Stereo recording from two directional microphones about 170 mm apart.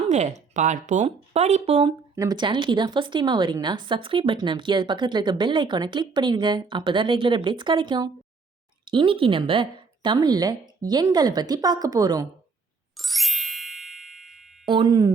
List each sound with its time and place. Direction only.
0.1 s speech: 45° right (ahead or behind)
2.1 s a woman's voice: 25° right (ahead or behind)
13.0 s ding: centre (ahead or behind)
14.7 s a woman's voice: 25° right (ahead or behind)